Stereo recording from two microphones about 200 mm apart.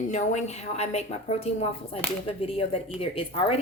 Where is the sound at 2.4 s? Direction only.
30° left (ahead or behind).